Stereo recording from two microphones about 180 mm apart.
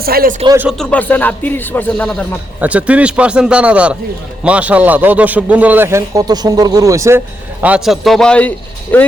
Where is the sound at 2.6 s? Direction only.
10° right (ahead or behind).